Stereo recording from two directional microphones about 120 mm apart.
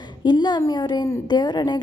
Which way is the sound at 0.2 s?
35° left (ahead or behind).